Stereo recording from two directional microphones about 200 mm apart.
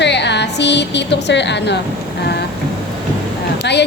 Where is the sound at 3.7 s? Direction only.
60° left (ahead or behind).